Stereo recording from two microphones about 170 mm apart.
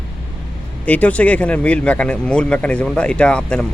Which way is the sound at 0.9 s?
10° left (ahead or behind).